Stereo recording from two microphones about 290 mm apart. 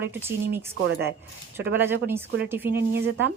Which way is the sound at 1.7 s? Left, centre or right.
Centre.